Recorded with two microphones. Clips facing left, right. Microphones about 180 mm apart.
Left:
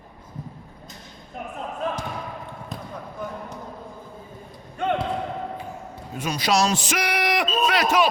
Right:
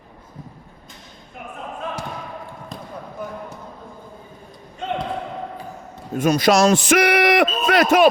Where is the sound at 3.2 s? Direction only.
5° right (ahead or behind).